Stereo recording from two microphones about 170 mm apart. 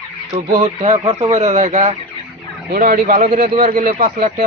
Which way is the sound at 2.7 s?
55° right (ahead or behind).